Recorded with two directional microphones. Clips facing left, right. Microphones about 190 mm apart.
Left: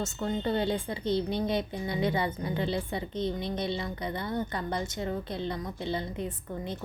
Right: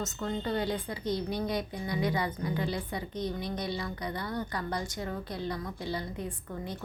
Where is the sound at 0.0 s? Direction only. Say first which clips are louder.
Left 3 dB; 30° left (ahead or behind).